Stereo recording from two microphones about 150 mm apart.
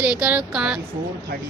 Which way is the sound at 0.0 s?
10° right (ahead or behind).